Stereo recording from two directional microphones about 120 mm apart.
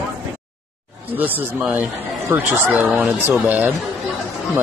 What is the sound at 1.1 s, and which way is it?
Speech, 15° right (ahead or behind).